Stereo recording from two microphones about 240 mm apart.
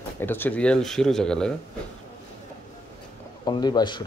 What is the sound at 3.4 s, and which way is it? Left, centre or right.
Speech, centre.